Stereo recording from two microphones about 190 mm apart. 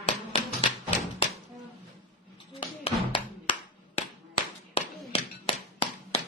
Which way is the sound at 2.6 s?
30° left (ahead or behind).